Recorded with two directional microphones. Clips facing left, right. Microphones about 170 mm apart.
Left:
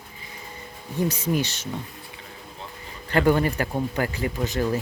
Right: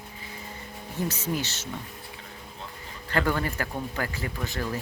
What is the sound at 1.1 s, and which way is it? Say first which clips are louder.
Speech: left 5 dB; 15° left (ahead or behind).